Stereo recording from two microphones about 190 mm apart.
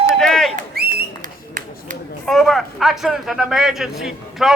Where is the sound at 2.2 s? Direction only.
Centre (ahead or behind).